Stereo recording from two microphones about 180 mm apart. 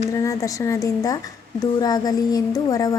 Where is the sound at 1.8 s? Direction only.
20° left (ahead or behind).